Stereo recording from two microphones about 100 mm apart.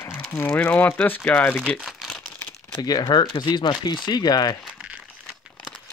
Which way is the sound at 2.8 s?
45° left (ahead or behind).